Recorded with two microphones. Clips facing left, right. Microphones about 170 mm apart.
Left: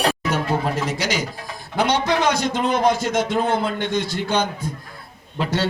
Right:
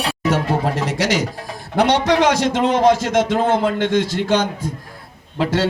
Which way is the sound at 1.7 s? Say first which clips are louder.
Right 4 dB; 75° right (ahead or behind).